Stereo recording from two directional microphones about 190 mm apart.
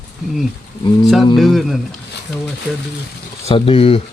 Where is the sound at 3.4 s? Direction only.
30° left (ahead or behind).